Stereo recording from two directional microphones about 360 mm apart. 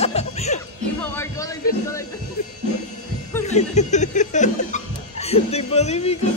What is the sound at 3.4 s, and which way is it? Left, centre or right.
Chuckle, centre.